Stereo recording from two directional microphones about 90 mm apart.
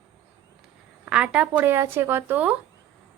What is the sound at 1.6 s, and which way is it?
Speech, 25° right (ahead or behind).